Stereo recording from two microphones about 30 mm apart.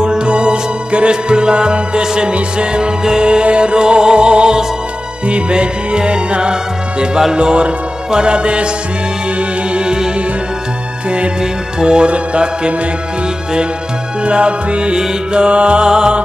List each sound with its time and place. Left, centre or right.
0.0 s music: right
9.8 s music: right
11.8 s music: right
14.2 s music: right